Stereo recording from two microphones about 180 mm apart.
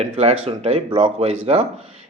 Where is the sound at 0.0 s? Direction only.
35° right (ahead or behind).